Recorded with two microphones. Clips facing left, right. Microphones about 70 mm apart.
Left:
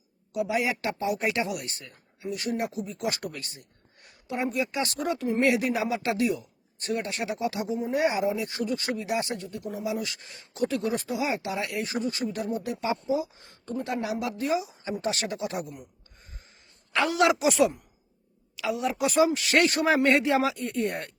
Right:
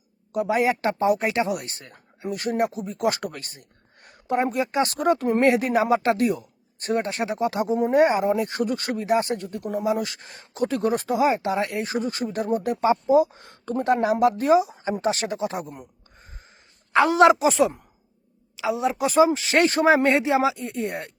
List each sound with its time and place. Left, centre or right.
0.3 s speech: right
4.0 s a sound: right
4.5 s speech: right
13.1 s speech: right
16.9 s speech: right
20.8 s speech: centre